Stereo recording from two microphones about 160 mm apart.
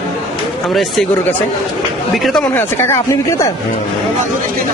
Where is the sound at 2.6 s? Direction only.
15° left (ahead or behind).